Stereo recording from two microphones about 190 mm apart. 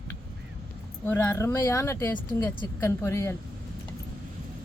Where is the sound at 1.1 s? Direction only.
15° left (ahead or behind).